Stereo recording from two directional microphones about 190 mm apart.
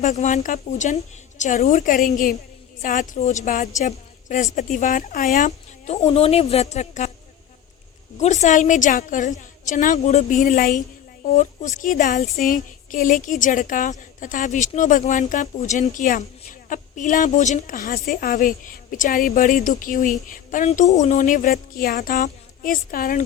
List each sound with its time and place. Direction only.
0.0 s a woman's voice: 40° left (ahead or behind)
8.2 s a woman's voice: 40° left (ahead or behind)